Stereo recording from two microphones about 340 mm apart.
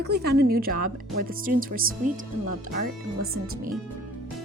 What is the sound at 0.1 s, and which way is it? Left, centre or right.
Speech, right.